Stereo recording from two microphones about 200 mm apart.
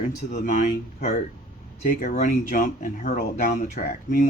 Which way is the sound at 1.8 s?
45° left (ahead or behind).